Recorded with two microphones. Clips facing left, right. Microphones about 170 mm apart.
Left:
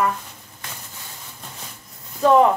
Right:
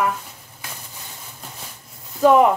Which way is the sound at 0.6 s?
5° right (ahead or behind).